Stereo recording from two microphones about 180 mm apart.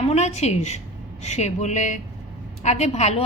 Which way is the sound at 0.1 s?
40° left (ahead or behind).